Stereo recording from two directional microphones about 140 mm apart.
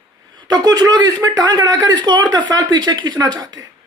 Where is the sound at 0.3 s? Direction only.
30° right (ahead or behind).